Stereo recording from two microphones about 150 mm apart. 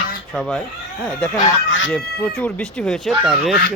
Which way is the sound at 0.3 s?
5° left (ahead or behind).